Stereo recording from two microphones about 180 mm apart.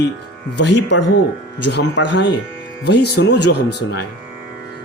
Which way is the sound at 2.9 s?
70° left (ahead or behind).